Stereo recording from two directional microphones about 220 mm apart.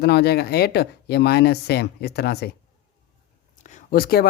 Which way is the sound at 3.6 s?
40° left (ahead or behind).